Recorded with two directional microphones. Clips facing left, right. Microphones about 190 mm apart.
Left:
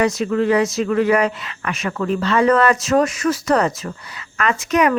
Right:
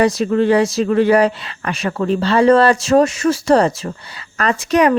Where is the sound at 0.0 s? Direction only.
35° right (ahead or behind).